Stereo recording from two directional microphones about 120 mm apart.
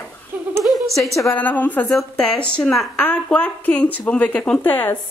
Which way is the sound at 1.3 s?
15° left (ahead or behind).